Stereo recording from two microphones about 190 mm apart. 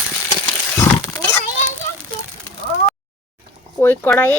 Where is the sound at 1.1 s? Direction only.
15° left (ahead or behind).